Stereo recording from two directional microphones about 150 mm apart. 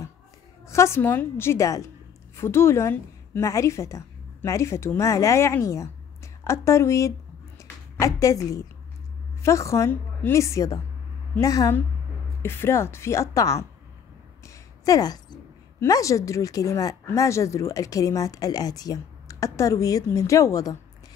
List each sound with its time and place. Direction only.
0.7 s a woman's voice: 20° left (ahead or behind)
14.4 s a sound: 20° left (ahead or behind)
15.8 s speech: 20° left (ahead or behind)